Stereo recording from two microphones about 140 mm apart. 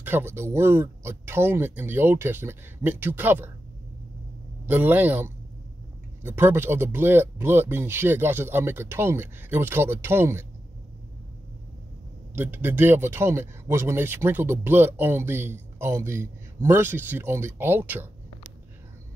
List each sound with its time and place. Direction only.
0.0 s speech: 15° right (ahead or behind)
4.6 s speech: 15° right (ahead or behind)
12.4 s speech: 15° right (ahead or behind)